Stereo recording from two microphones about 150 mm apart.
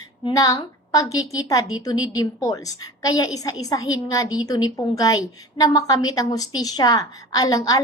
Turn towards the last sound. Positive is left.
turn(degrees=25)  # may be behind; listen again after turning